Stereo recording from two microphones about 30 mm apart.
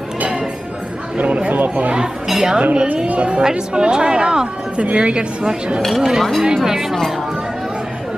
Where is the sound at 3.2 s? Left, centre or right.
Right.